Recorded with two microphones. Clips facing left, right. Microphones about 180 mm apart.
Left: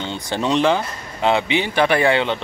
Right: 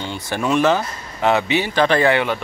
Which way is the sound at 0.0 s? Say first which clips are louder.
Even; 20° left (ahead or behind).